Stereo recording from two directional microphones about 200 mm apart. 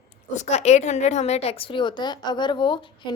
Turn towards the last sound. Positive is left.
turn(degrees=25)  # may be behind; listen again after turning